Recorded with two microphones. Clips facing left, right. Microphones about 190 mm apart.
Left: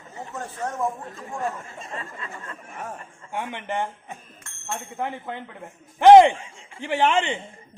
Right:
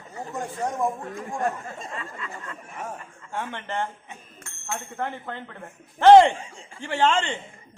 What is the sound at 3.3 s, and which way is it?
A man's voice, 15° left (ahead or behind).